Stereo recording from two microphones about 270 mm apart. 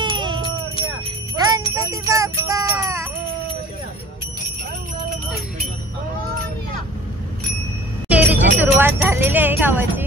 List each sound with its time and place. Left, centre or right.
0.0 s a sound: centre
1.4 s jingle bell: centre
8.1 s music: centre
8.5 s jingle bell: centre